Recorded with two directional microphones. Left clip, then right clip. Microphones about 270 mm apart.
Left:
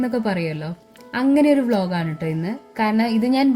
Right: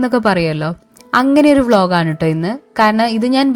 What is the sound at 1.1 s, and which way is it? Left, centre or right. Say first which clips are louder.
Speech: right 7 dB; right.